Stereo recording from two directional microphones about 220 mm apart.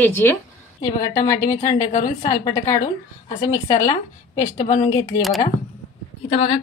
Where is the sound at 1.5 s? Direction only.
35° left (ahead or behind).